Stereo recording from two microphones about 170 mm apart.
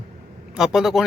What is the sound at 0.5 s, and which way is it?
Speech, 5° right (ahead or behind).